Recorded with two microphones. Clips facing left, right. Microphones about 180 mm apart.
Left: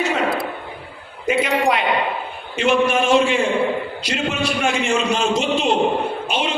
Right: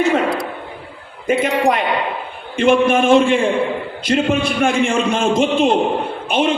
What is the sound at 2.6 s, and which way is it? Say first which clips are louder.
A man's voice: right 4 dB; 50° right (ahead or behind).